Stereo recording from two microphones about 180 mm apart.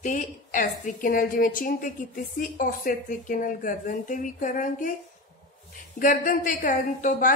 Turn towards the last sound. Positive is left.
turn(degrees=45)  # may be behind; listen again after turning